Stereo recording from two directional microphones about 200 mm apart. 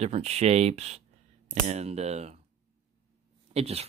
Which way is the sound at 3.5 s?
30° right (ahead or behind).